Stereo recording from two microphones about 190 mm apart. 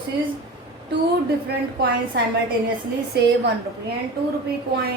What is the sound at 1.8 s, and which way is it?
A woman's voice, 60° right (ahead or behind).